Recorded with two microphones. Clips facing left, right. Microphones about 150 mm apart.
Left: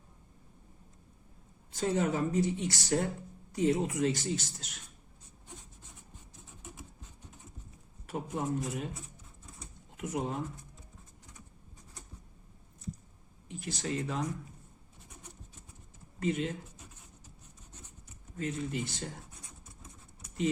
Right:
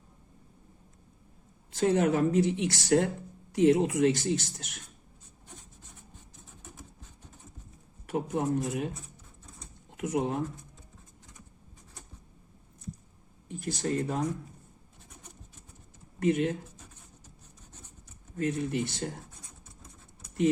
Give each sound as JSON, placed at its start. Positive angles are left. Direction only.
{"t": 1.7, "sound": "speech", "side_deg": -70}
{"t": 8.0, "sound": "speech", "side_deg": -60}
{"t": 10.0, "sound": "speech", "side_deg": -70}
{"t": 13.5, "sound": "speech", "side_deg": -45}
{"t": 16.2, "sound": "speech", "side_deg": -55}
{"t": 18.3, "sound": "speech", "side_deg": -55}